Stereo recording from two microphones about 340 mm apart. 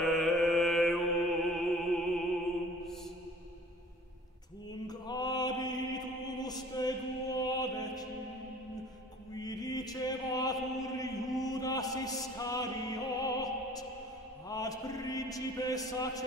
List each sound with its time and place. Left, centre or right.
0.0 s mantra: centre
4.8 s mantra: centre
9.3 s chant: centre
13.2 s music: centre
14.5 s a sound: centre